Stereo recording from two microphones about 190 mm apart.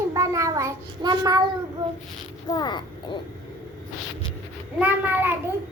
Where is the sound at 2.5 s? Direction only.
20° left (ahead or behind).